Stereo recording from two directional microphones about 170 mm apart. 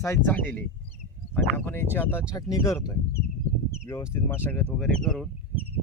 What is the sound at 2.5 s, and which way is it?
Speech, 20° left (ahead or behind).